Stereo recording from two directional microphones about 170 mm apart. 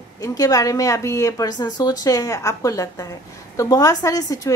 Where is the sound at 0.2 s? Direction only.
20° left (ahead or behind).